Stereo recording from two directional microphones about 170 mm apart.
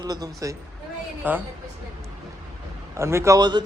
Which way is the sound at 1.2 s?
10° right (ahead or behind).